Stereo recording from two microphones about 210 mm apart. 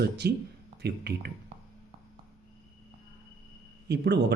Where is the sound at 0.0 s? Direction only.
50° right (ahead or behind).